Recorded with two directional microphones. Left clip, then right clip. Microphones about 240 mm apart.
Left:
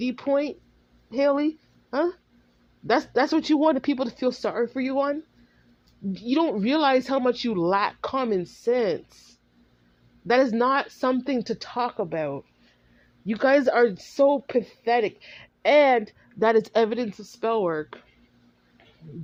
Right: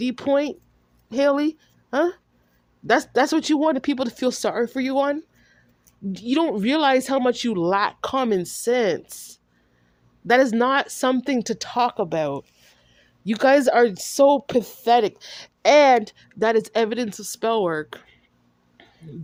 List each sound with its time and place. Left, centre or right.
0.0 s speech: right
10.2 s speech: right